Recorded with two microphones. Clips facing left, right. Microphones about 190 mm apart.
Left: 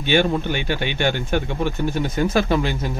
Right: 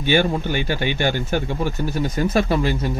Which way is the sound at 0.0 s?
45° right (ahead or behind).